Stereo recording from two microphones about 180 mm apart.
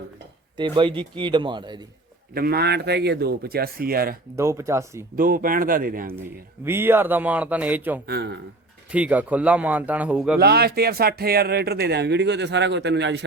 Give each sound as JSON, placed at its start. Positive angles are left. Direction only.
{"t": 0.5, "sound": "a man's voice", "side_deg": -25}
{"t": 2.3, "sound": "speech", "side_deg": -60}
{"t": 4.4, "sound": "speech", "side_deg": -15}
{"t": 5.1, "sound": "speech", "side_deg": -50}
{"t": 6.7, "sound": "speech", "side_deg": -10}
{"t": 8.0, "sound": "speech", "side_deg": -65}
{"t": 8.9, "sound": "speech", "side_deg": -10}
{"t": 10.3, "sound": "speech", "side_deg": -60}